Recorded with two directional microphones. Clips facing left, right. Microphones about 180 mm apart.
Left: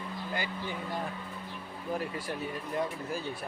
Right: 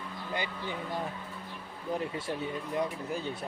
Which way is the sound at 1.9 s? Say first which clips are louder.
Right 1 dB; 25° right (ahead or behind).